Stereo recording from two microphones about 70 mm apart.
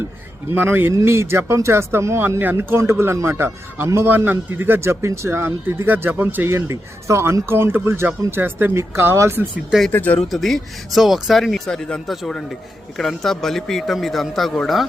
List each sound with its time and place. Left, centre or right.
0.5 s speech: right
6.5 s speech: right
9.9 s speech: left
10.2 s speech: centre